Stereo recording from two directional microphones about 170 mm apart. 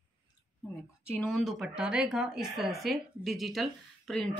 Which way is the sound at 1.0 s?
5° left (ahead or behind).